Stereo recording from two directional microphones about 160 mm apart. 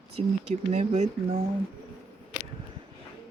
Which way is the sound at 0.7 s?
45° right (ahead or behind).